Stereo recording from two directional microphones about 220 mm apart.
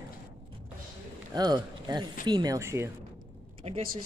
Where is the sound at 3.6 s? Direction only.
30° right (ahead or behind).